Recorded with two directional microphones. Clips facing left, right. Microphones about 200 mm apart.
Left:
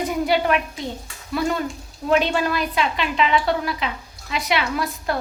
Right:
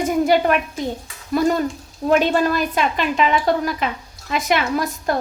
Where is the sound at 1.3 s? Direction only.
40° right (ahead or behind).